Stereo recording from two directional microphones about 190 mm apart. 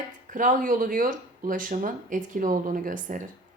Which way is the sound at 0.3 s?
45° right (ahead or behind).